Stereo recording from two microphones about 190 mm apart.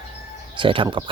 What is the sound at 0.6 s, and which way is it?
Speech, 25° right (ahead or behind).